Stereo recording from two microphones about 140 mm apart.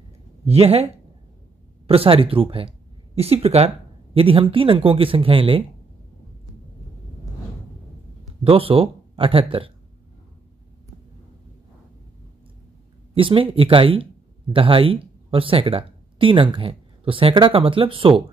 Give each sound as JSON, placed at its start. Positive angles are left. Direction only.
{"t": 0.5, "sound": "speech", "side_deg": -45}
{"t": 8.5, "sound": "speech", "side_deg": -40}
{"t": 13.1, "sound": "speech", "side_deg": -40}